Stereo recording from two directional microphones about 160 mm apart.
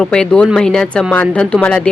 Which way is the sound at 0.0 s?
5° left (ahead or behind).